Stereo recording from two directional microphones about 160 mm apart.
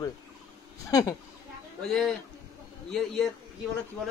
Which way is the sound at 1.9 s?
5° left (ahead or behind).